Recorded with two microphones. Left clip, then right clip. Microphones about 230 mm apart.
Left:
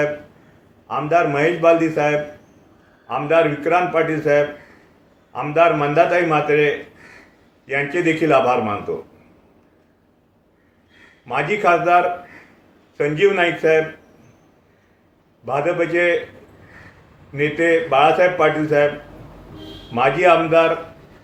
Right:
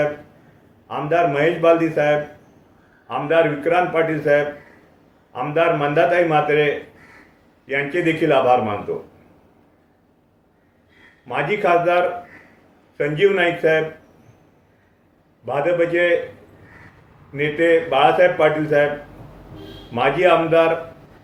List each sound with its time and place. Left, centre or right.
0.9 s a man's voice: centre
7.7 s a man's voice: centre
11.3 s a man's voice: centre
13.0 s a man's voice: centre
15.4 s a man's voice: centre
17.3 s a man's voice: centre
19.9 s a man's voice: centre